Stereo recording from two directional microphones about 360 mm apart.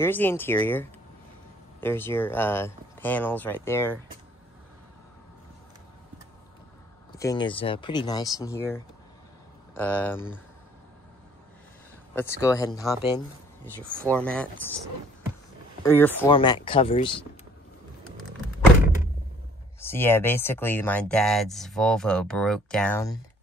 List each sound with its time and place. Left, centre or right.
0.0 s speech: centre
7.2 s speech: centre
12.2 s speech: centre
14.0 s speech: centre
15.8 s speech: centre
19.9 s speech: centre